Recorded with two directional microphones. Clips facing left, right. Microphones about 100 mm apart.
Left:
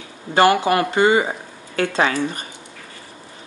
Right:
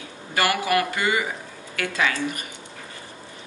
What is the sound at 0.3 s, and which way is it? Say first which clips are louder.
Speech: left 7 dB; 25° left (ahead or behind).